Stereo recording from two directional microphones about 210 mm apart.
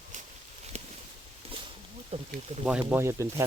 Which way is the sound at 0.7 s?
30° right (ahead or behind).